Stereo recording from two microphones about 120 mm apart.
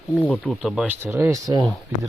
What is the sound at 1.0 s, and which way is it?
Speech, 20° right (ahead or behind).